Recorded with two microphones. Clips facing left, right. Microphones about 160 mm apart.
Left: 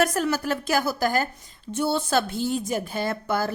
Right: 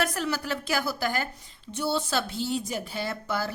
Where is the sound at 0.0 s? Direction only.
45° left (ahead or behind).